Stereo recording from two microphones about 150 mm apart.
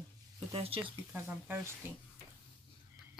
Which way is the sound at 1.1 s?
15° right (ahead or behind).